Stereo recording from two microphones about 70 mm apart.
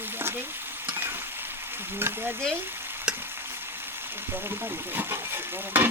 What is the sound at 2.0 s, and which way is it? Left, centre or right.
Speech, right.